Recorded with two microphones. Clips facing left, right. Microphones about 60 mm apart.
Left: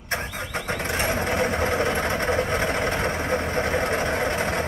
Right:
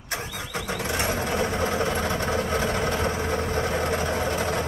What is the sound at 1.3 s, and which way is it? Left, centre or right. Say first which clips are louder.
Vehicle: left 2 dB; left.